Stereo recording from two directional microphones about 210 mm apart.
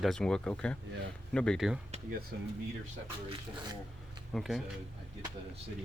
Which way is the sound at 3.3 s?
25° right (ahead or behind).